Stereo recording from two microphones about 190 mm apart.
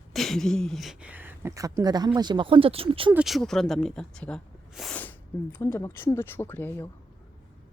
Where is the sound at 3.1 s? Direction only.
Centre (ahead or behind).